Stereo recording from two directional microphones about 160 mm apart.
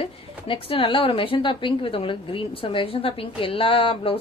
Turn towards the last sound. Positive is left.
turn(degrees=35)  # may be behind; listen again after turning